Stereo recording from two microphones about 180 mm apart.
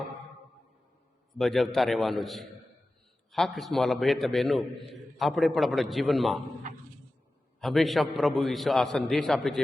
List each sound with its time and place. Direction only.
1.4 s a man's voice: centre (ahead or behind)
7.6 s a man's voice: centre (ahead or behind)